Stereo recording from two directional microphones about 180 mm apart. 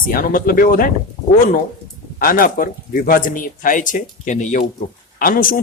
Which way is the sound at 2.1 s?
50° left (ahead or behind).